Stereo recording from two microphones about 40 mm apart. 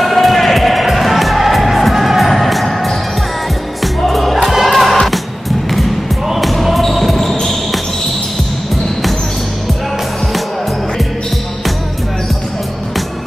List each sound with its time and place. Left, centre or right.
0.0 s music: centre
6.2 s basketball bounce: centre